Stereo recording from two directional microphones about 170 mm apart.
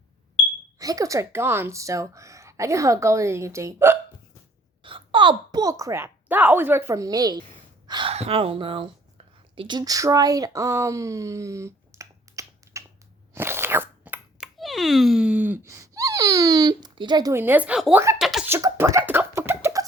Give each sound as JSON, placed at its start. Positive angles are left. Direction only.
{"t": 0.8, "sound": "speech", "side_deg": -20}
{"t": 4.8, "sound": "speech", "side_deg": -30}
{"t": 8.1, "sound": "speech", "side_deg": -35}
{"t": 13.3, "sound": "crunch", "side_deg": -15}
{"t": 17.3, "sound": "speech", "side_deg": -10}
{"t": 18.2, "sound": "a sound", "side_deg": 0}
{"t": 18.4, "sound": "a sound", "side_deg": -15}